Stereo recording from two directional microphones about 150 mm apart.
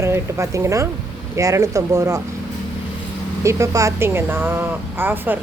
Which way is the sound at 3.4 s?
20° right (ahead or behind).